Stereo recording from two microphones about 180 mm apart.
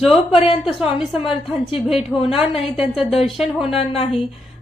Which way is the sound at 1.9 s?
Centre (ahead or behind).